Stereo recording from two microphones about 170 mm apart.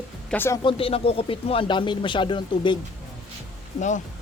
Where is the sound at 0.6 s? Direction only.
30° left (ahead or behind).